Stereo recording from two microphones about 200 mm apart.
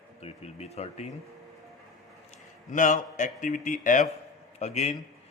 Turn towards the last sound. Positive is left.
turn(degrees=35)  # may be behind; listen again after turning